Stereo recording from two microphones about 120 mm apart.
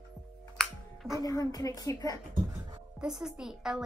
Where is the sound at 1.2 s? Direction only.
30° left (ahead or behind).